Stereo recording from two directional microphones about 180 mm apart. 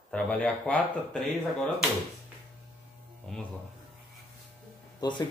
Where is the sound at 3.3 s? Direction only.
Centre (ahead or behind).